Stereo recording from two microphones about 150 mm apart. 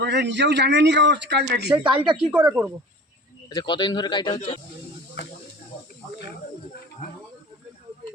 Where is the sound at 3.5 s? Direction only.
30° left (ahead or behind).